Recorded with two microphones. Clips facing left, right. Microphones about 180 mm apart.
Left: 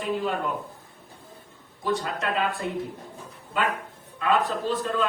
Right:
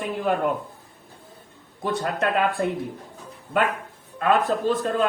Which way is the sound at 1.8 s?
55° right (ahead or behind).